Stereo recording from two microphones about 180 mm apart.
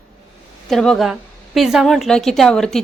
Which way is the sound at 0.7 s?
Centre (ahead or behind).